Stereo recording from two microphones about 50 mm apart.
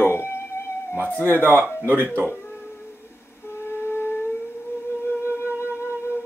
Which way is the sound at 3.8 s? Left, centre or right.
Left.